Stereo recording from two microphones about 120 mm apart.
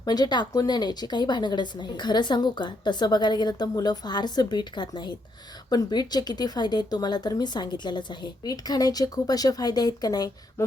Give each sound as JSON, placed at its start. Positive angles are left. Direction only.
{"t": 0.0, "sound": "speech", "side_deg": 35}